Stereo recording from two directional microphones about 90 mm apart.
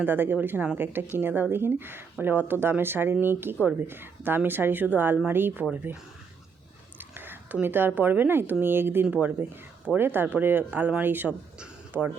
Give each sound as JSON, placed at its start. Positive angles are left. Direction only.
{"t": 0.0, "sound": "speech", "side_deg": -20}
{"t": 7.1, "sound": "speech", "side_deg": -25}
{"t": 9.0, "sound": "speech", "side_deg": -10}
{"t": 11.9, "sound": "speech", "side_deg": -10}